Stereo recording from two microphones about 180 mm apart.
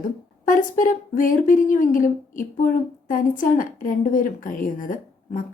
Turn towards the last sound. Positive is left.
turn(degrees=45)  # may be behind; listen again after turning